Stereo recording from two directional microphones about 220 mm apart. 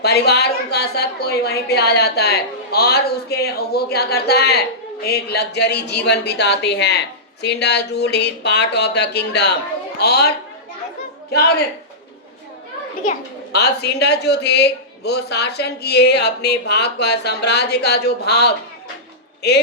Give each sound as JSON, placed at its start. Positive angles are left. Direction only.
{"t": 0.0, "sound": "a woman's voice", "side_deg": 45}
{"t": 13.1, "sound": "a woman's voice", "side_deg": 45}